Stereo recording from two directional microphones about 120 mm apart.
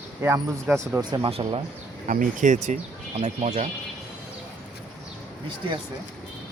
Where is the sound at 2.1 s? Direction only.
90° right.